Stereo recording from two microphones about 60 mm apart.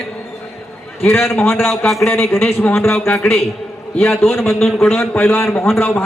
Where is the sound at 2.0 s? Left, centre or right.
Left.